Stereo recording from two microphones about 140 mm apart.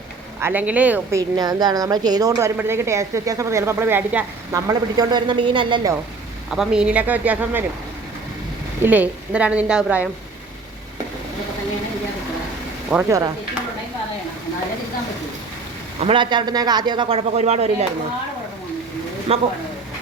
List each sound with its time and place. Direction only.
0.3 s speech: 15° right (ahead or behind)
1.4 s speech: 30° right (ahead or behind); by 4.3 s 15° right (ahead or behind)
4.5 s a man's voice: 30° right (ahead or behind)
6.5 s speech: 5° right (ahead or behind)
8.8 s speech: 10° right (ahead or behind)
13.1 s speech: 25° right (ahead or behind)
16.0 s a man's voice: 40° right (ahead or behind)
19.3 s speech: 45° right (ahead or behind)